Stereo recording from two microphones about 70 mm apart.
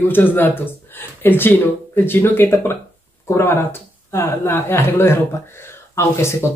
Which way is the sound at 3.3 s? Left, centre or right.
Left.